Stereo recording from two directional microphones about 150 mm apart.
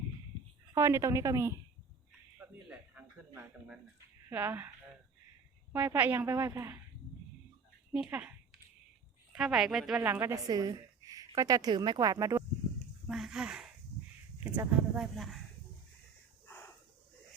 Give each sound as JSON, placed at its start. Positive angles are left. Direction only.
{"t": 0.7, "sound": "speech", "side_deg": -20}
{"t": 2.4, "sound": "a sound", "side_deg": -10}
{"t": 4.3, "sound": "a woman's voice", "side_deg": -10}
{"t": 5.7, "sound": "a woman's voice", "side_deg": -10}
{"t": 9.3, "sound": "speech", "side_deg": -5}
{"t": 10.0, "sound": "a woman's voice", "side_deg": -15}
{"t": 13.1, "sound": "speech", "side_deg": -5}
{"t": 14.5, "sound": "a woman's voice", "side_deg": -15}
{"t": 14.9, "sound": "speech", "side_deg": 0}